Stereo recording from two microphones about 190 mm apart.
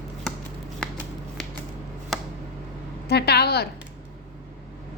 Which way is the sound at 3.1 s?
60° left (ahead or behind).